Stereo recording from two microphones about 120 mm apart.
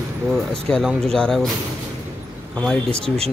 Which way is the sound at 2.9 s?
55° right (ahead or behind).